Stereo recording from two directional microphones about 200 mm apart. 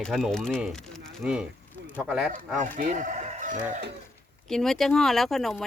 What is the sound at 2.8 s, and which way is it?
Speech, 40° right (ahead or behind).